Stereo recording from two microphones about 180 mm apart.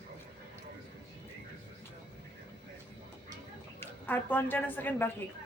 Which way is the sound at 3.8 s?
10° left (ahead or behind).